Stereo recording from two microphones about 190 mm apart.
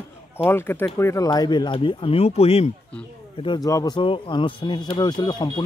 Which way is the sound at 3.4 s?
20° left (ahead or behind).